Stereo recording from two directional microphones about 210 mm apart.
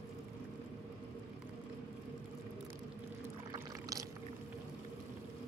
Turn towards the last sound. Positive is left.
turn(degrees=-15)  # may be behind; listen again after turning